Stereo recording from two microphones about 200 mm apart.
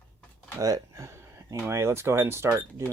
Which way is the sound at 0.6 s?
15° right (ahead or behind).